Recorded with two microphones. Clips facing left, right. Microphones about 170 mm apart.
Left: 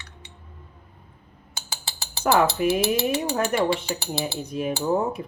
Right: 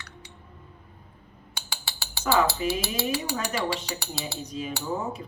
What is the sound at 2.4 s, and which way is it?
Speech, 55° left (ahead or behind).